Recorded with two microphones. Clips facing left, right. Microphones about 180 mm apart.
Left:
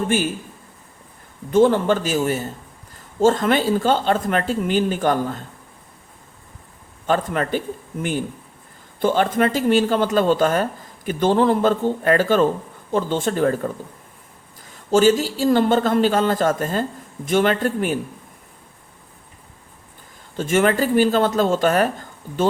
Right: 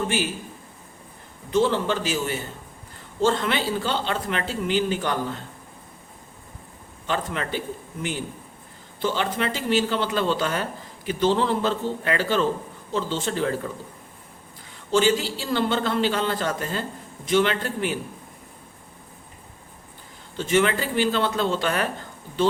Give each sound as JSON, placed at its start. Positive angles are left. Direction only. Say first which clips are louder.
{"t": 1.5, "sound": "speech", "louder": "left 6 dB", "side_deg": 50}
{"t": 7.1, "sound": "speech", "louder": "left 7 dB", "side_deg": 50}
{"t": 9.0, "sound": "speech", "louder": "left 7 dB", "side_deg": 50}
{"t": 14.8, "sound": "speech", "louder": "left 5 dB", "side_deg": 45}
{"t": 20.3, "sound": "speech", "louder": "left 3 dB", "side_deg": 50}